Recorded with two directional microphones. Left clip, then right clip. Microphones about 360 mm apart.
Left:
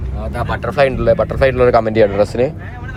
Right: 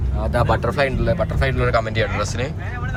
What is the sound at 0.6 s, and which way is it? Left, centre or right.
Speech, centre.